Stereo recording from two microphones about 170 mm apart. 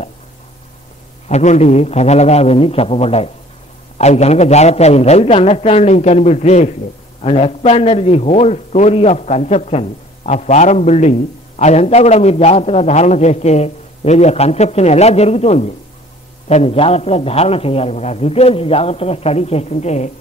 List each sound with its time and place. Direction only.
1.3 s a man's voice: 40° left (ahead or behind)